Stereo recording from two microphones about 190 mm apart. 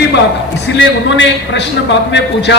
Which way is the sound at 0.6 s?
70° left (ahead or behind).